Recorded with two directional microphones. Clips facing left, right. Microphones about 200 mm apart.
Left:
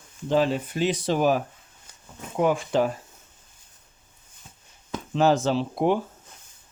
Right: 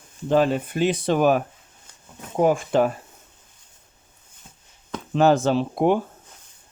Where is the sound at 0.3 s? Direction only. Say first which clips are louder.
Right 3 dB; 50° right (ahead or behind).